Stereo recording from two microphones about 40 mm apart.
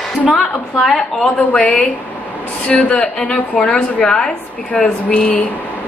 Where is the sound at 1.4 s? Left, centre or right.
Left; by 4.3 s centre.